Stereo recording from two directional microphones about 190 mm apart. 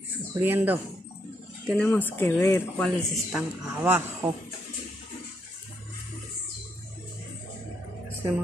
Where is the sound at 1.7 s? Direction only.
5° left (ahead or behind).